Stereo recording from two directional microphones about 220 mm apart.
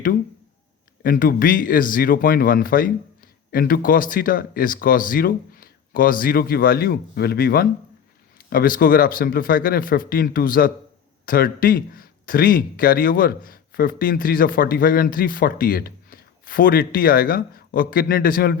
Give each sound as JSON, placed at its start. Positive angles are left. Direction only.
{"t": 1.0, "sound": "speech", "side_deg": 40}